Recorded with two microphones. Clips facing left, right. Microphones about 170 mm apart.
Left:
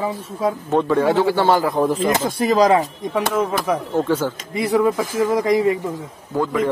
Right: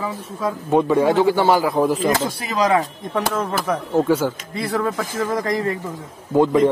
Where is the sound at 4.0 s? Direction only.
10° right (ahead or behind).